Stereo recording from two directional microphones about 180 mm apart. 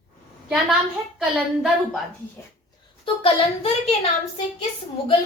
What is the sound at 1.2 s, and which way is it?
Speech, centre (ahead or behind).